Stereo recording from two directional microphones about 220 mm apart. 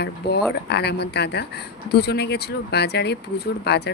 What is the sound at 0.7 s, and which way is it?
Speech, 50° left (ahead or behind).